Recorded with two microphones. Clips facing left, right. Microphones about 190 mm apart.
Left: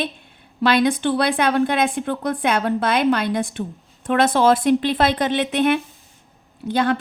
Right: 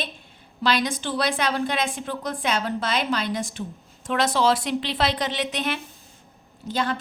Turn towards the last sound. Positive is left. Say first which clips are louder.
# left 6 dB
turn(degrees=60)  # may be behind; listen again after turning